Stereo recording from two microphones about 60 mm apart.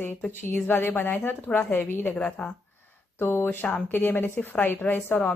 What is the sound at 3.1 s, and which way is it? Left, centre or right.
Speech, left.